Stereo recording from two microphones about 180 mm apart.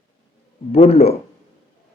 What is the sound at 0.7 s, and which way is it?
Speech, 35° left (ahead or behind).